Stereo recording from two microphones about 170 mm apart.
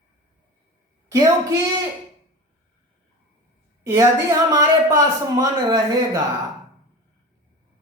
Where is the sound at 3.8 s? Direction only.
15° right (ahead or behind).